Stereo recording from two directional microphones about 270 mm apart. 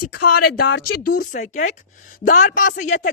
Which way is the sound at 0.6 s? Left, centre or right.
Left.